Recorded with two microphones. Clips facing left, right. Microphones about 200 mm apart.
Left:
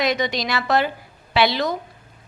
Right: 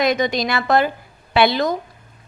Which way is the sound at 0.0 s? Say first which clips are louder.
Right 3 dB; 50° right (ahead or behind).